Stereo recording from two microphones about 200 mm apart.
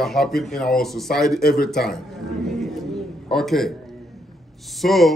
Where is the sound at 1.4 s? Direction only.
50° left (ahead or behind).